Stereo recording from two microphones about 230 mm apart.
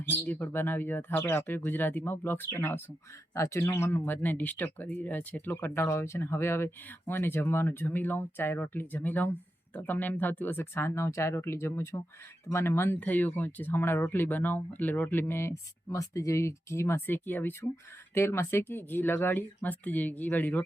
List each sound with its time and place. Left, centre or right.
0.3 s speech: centre